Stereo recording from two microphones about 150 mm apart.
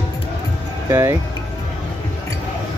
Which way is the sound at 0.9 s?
20° right (ahead or behind).